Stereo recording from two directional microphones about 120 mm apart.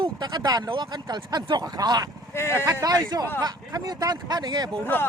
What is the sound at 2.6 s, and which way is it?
Speech, 30° right (ahead or behind).